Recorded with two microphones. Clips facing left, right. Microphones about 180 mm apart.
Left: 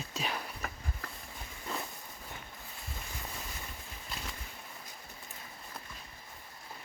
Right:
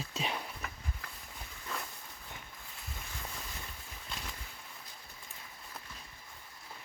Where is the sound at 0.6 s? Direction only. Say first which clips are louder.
Left 3 dB; 45° left (ahead or behind).